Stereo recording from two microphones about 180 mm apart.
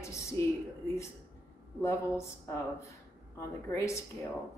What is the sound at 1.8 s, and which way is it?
Speech, 15° left (ahead or behind).